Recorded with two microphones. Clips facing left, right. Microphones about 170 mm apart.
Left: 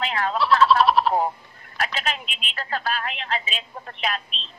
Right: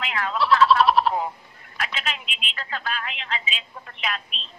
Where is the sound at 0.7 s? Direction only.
Centre (ahead or behind).